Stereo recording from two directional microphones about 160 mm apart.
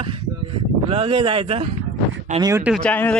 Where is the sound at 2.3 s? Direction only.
20° right (ahead or behind).